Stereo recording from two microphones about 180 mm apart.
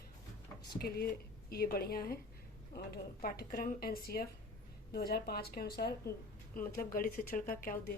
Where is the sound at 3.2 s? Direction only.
55° left (ahead or behind).